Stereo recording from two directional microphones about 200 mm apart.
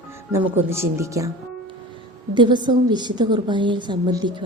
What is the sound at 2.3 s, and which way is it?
A woman's voice, 25° right (ahead or behind).